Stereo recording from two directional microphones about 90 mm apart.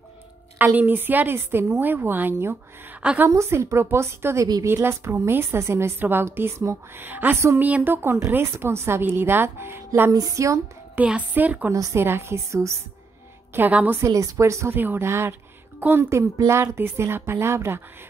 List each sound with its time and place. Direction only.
0.6 s a woman's voice: 20° right (ahead or behind)
10.1 s a woman's voice: 40° right (ahead or behind)
11.0 s a woman's voice: 15° right (ahead or behind)
11.7 s a woman's voice: 40° right (ahead or behind)
13.6 s a woman's voice: 20° right (ahead or behind)
14.0 s a woman's voice: 35° right (ahead or behind)